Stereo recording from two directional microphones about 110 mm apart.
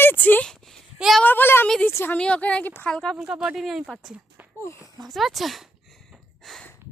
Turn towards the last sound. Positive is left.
turn(degrees=0)  # may be behind; listen again after turning